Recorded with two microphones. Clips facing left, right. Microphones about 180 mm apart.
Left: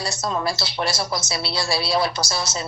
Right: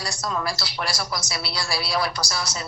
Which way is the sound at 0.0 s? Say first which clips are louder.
Left 3 dB; 25° left (ahead or behind).